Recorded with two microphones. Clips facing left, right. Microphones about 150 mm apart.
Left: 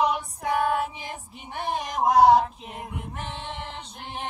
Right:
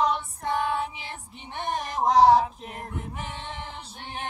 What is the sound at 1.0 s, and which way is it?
Child singing, 10° left (ahead or behind).